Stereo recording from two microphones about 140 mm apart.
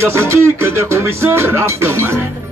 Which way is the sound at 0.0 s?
15° right (ahead or behind).